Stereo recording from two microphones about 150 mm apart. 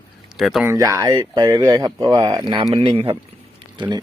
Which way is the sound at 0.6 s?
20° right (ahead or behind).